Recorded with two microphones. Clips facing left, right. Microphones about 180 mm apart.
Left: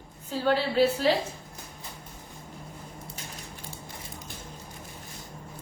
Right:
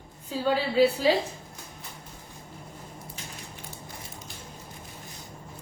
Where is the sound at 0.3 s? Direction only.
10° right (ahead or behind).